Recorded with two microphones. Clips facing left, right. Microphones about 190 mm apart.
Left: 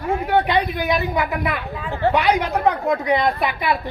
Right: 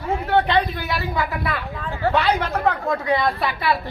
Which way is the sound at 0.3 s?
15° left (ahead or behind).